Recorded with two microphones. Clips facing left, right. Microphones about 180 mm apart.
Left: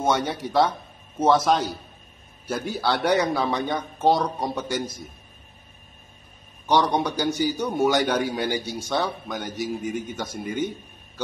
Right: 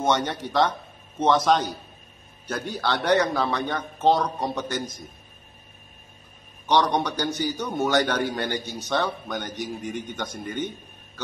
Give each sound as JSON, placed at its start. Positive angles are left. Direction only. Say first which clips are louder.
{"t": 0.0, "sound": "a man's voice", "louder": "even", "side_deg": 10}
{"t": 6.7, "sound": "a man's voice", "louder": "left 1 dB", "side_deg": 10}